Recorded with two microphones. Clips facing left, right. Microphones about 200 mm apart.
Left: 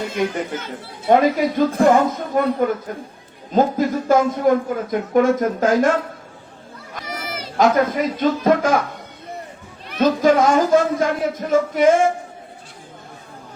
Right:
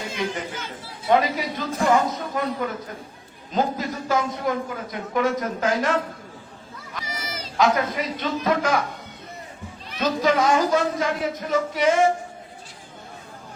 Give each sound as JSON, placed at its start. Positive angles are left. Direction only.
{"t": 0.2, "sound": "speech", "side_deg": 50}
{"t": 6.9, "sound": "a sound", "side_deg": 60}
{"t": 7.5, "sound": "speech", "side_deg": 45}
{"t": 9.9, "sound": "speech", "side_deg": 50}